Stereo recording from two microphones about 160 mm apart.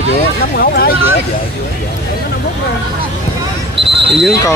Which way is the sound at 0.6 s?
70° left (ahead or behind).